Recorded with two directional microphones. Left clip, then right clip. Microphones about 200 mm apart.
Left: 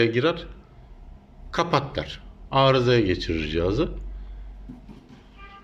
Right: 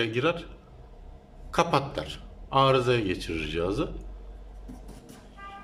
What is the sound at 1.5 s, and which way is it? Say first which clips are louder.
A man's voice: left 1 dB; 5° right (ahead or behind).